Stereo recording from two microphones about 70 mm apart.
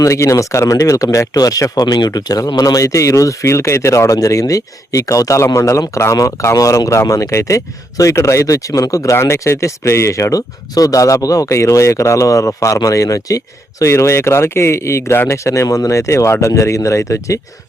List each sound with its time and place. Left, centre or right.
0.0 s speech: left
9.1 s speech: left